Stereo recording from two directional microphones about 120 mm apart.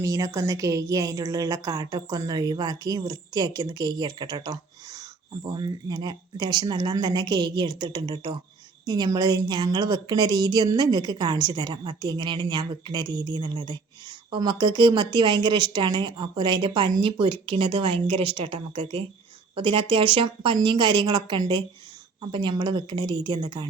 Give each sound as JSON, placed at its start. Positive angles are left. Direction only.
{"t": 0.0, "sound": "a woman's voice", "side_deg": -25}